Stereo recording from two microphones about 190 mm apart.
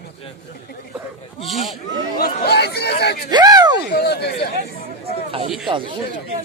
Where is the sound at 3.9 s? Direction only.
60° left (ahead or behind).